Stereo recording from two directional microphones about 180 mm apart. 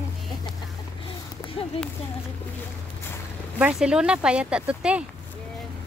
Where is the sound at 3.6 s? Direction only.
5° right (ahead or behind).